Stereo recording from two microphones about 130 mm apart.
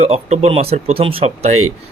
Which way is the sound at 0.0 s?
55° right (ahead or behind).